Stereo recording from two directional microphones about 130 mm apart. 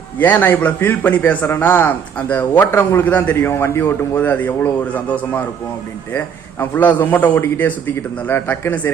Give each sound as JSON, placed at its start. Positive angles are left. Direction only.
{"t": 0.2, "sound": "a man's voice", "side_deg": 15}